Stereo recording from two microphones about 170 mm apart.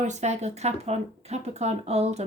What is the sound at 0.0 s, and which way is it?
Speech, 45° right (ahead or behind).